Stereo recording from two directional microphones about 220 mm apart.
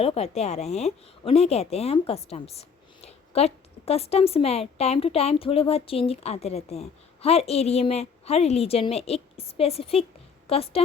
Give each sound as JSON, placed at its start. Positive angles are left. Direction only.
{"t": 0.0, "sound": "a woman's voice", "side_deg": 25}